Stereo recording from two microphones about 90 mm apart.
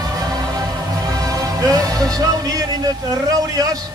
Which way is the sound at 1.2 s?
45° right (ahead or behind).